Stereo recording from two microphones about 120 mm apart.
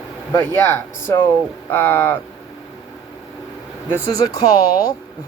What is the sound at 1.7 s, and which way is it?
Speech, 20° left (ahead or behind).